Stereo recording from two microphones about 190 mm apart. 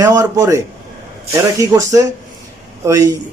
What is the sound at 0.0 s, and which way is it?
Speech, 15° right (ahead or behind).